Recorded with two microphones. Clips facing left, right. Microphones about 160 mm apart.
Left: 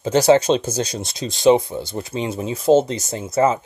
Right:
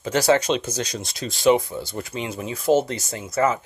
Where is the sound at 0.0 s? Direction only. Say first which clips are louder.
Left 5 dB; 25° left (ahead or behind).